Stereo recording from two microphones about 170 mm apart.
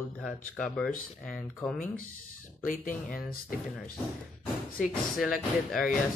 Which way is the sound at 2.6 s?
55° left (ahead or behind).